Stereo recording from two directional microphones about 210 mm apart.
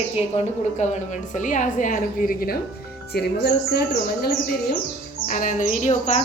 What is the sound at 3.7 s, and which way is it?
Speech, 45° left (ahead or behind).